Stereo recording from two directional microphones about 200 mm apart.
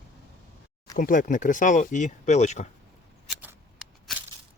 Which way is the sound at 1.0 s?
40° left (ahead or behind).